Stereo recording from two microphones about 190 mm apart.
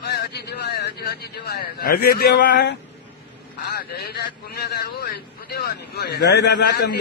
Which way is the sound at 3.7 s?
55° left (ahead or behind).